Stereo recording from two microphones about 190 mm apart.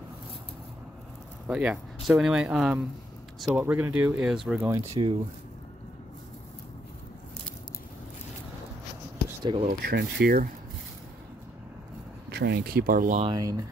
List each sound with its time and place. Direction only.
1.5 s speech: 5° right (ahead or behind)
4.6 s speech: 15° right (ahead or behind)
9.4 s speech: 25° right (ahead or behind)
9.7 s speech: 55° right (ahead or behind)
12.3 s speech: 55° right (ahead or behind)
13.2 s speech: 20° right (ahead or behind)